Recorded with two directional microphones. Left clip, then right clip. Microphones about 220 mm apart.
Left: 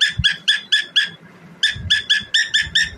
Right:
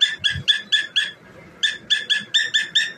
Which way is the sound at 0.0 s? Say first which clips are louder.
Left 3 dB; 20° left (ahead or behind).